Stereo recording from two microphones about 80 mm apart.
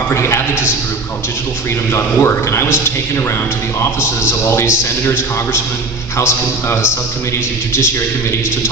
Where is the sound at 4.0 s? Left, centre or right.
Left.